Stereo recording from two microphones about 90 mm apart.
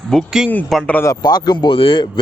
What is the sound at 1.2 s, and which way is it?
Speech, 50° left (ahead or behind).